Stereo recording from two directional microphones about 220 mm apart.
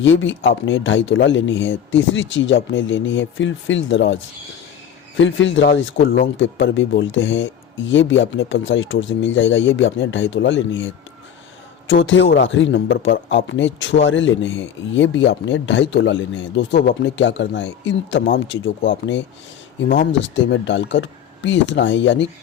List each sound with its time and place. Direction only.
0.0 s a man's voice: 60° left (ahead or behind)